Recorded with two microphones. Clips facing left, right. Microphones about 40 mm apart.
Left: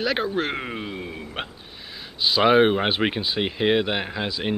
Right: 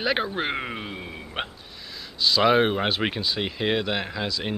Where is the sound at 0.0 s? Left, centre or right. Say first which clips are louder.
Left 1 dB; centre.